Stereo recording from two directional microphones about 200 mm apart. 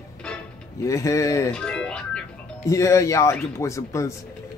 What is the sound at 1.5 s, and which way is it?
Music, 5° left (ahead or behind).